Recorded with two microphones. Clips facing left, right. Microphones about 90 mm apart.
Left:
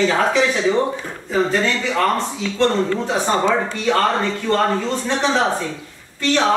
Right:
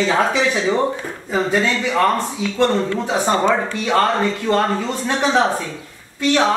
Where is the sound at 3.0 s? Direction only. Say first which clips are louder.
Right 3 dB; 5° right (ahead or behind).